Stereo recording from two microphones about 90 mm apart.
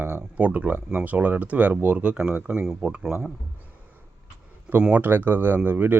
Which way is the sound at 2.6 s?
5° right (ahead or behind).